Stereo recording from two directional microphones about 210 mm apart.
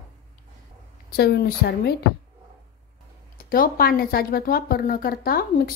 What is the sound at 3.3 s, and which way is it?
A woman's voice, 45° left (ahead or behind).